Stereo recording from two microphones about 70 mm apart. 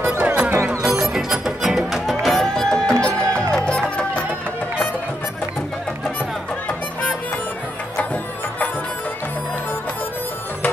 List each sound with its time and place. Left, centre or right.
0.2 s music: right
0.8 s music: centre
8.0 s music: left